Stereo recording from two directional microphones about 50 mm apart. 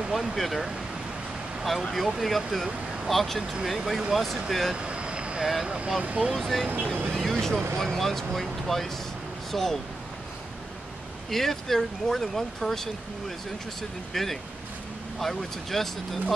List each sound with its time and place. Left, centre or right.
0.1 s speech: centre
4.7 s vehicle: right
5.4 s speech: centre
6.0 s speech: centre
6.3 s speech: centre
11.2 s speech: centre
14.1 s speech: centre